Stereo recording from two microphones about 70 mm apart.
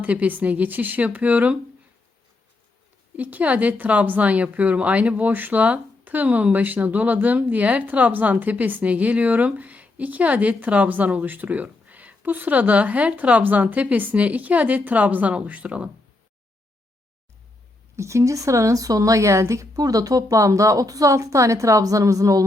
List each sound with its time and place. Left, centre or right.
0.0 s a woman's voice: right
3.2 s a woman's voice: right
17.9 s speech: right